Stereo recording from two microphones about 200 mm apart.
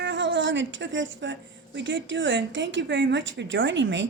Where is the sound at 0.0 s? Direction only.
65° right (ahead or behind).